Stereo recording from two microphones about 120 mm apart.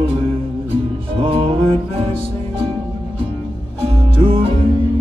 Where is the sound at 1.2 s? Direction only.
50° right (ahead or behind).